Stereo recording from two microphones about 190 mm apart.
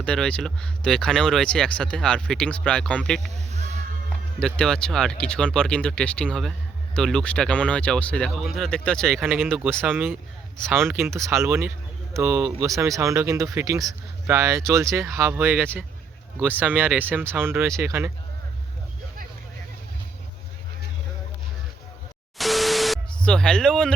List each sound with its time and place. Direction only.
0.0 s speech: 5° left (ahead or behind)
3.5 s music: 35° right (ahead or behind)
4.4 s speech: 5° left (ahead or behind)
10.8 s speech: 15° right (ahead or behind)
22.4 s a sound: centre (ahead or behind)